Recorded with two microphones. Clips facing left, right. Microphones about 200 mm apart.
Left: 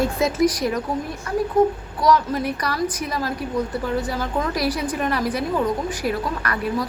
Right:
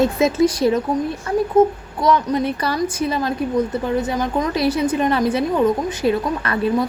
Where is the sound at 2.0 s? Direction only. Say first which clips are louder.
Right 2 dB; 20° right (ahead or behind).